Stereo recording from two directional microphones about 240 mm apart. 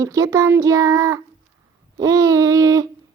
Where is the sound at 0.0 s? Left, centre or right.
Centre.